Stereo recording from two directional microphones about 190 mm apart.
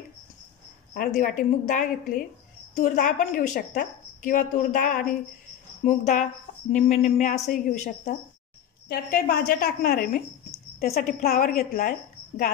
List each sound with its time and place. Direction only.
0.9 s a woman's voice: 45° left (ahead or behind)